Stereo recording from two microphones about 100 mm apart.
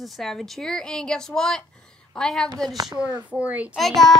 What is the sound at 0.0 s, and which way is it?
A woman's voice, centre (ahead or behind).